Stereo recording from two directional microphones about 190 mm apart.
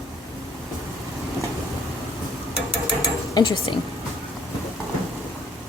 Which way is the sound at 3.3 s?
20° left (ahead or behind).